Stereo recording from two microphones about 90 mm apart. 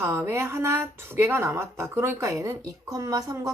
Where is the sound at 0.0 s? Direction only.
25° right (ahead or behind).